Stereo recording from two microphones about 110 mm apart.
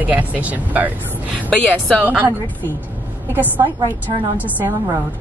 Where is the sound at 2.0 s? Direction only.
15° right (ahead or behind).